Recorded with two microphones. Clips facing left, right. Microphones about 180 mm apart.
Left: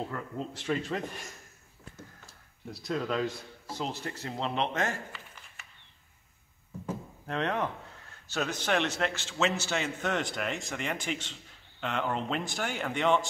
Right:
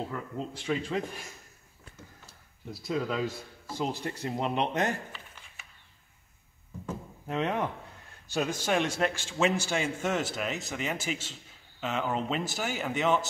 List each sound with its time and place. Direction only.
0.0 s speech: centre (ahead or behind)
2.2 s a sound: centre (ahead or behind)
3.7 s a man's voice: 10° right (ahead or behind)
7.2 s a man's voice: 10° right (ahead or behind)